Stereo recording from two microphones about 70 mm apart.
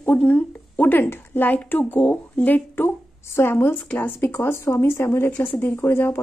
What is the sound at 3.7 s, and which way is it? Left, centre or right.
Speech, left.